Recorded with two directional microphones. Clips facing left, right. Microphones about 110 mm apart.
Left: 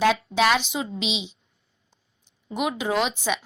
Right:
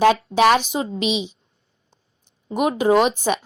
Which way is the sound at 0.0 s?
55° right (ahead or behind).